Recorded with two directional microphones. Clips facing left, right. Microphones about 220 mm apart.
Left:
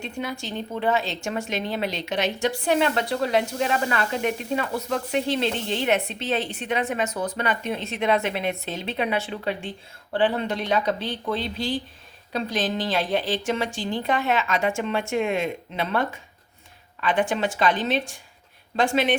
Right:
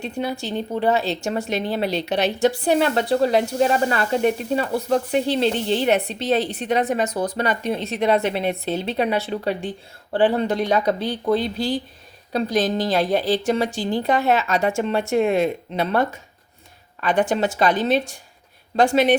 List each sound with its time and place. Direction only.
0.0 s speech: 35° right (ahead or behind)